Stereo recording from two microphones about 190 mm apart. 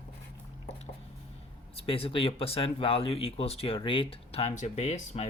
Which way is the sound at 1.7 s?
30° left (ahead or behind).